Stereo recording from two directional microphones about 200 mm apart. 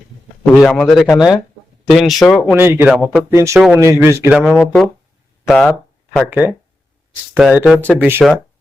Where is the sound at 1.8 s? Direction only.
Centre (ahead or behind).